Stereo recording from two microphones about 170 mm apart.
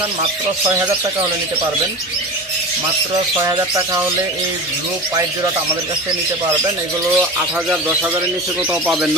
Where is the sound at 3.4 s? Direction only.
20° right (ahead or behind).